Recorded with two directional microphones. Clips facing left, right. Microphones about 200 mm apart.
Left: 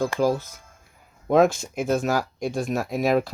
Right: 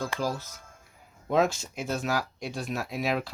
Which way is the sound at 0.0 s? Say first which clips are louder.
Left 9 dB; 55° left (ahead or behind).